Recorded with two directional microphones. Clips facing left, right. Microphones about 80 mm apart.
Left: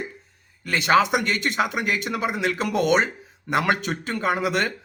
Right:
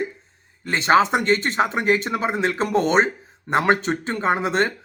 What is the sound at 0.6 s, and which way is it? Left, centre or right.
Speech, right.